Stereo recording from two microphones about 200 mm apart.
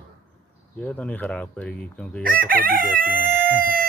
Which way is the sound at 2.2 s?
45° right (ahead or behind).